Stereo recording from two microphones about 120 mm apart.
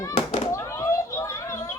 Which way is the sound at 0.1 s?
90° left.